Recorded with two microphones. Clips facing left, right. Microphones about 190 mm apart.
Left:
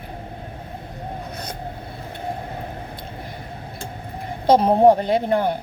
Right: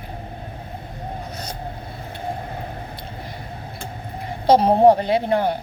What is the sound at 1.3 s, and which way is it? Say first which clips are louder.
Vehicle: even; 55° left (ahead or behind).